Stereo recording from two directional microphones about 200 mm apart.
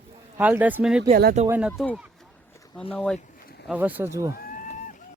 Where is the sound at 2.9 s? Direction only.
5° left (ahead or behind).